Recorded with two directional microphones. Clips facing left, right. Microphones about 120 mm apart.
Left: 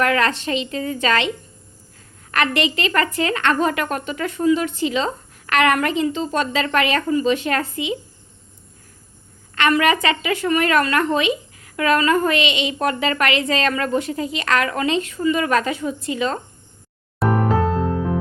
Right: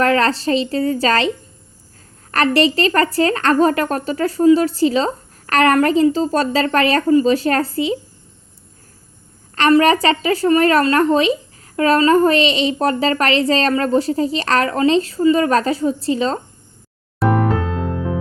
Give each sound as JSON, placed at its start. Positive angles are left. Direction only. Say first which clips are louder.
{"t": 0.0, "sound": "speech", "louder": "right 4 dB", "side_deg": -35}
{"t": 2.3, "sound": "speech", "louder": "right 5 dB", "side_deg": -35}
{"t": 9.6, "sound": "speech", "louder": "right 5 dB", "side_deg": -35}
{"t": 17.2, "sound": "music", "louder": "right 3 dB", "side_deg": 0}